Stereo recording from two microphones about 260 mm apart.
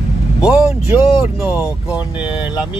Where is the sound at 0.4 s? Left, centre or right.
Centre.